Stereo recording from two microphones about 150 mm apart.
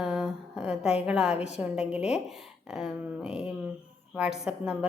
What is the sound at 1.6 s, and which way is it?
Speech, 5° right (ahead or behind).